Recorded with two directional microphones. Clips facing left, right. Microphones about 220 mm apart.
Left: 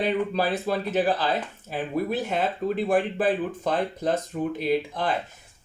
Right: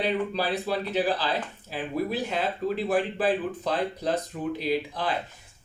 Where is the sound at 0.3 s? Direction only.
50° left (ahead or behind).